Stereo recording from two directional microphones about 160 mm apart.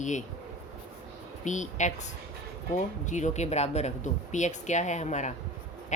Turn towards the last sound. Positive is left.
turn(degrees=45)  # may be behind; listen again after turning